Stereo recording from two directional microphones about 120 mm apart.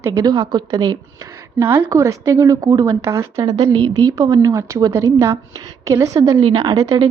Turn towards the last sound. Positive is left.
turn(degrees=-30)  # may be behind; listen again after turning